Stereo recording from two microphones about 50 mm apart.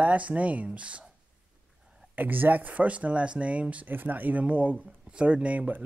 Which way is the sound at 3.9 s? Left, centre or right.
Right.